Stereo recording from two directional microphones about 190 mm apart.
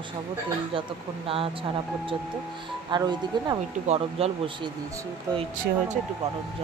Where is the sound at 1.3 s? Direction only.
30° right (ahead or behind).